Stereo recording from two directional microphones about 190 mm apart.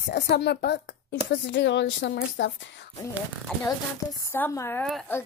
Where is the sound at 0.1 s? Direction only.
60° left (ahead or behind).